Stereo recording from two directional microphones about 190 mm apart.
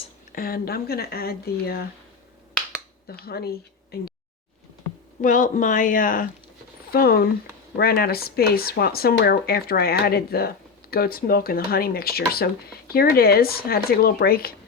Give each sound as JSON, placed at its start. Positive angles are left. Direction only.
{"t": 0.3, "sound": "speech", "side_deg": 50}
{"t": 3.1, "sound": "speech", "side_deg": 55}
{"t": 5.2, "sound": "speech", "side_deg": 45}